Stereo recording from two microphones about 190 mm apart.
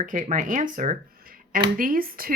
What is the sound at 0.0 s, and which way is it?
Speech, 45° right (ahead or behind).